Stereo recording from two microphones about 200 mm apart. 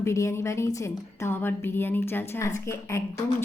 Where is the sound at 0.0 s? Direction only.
15° left (ahead or behind).